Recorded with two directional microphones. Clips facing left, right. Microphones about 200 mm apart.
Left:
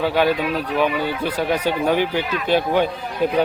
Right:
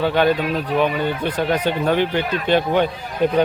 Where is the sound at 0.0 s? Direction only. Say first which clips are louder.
Right 1 dB; 5° left (ahead or behind).